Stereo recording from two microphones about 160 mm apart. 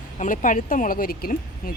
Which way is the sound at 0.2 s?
55° left (ahead or behind).